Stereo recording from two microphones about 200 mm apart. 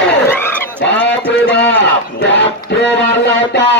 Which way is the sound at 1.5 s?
60° left (ahead or behind).